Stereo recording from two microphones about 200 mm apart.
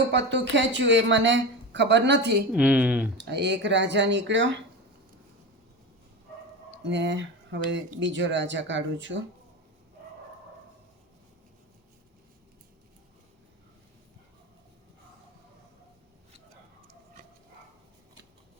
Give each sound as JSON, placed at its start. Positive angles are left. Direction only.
{"t": 0.1, "sound": "a woman's voice", "side_deg": -60}
{"t": 2.5, "sound": "speech", "side_deg": -5}
{"t": 3.2, "sound": "a woman's voice", "side_deg": -60}
{"t": 6.8, "sound": "a woman's voice", "side_deg": -65}